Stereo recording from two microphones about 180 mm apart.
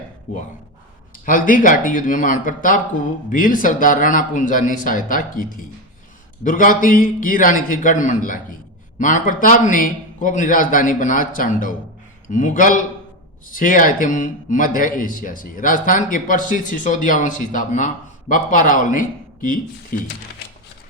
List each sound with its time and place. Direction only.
1.2 s a man's voice: 50° left (ahead or behind)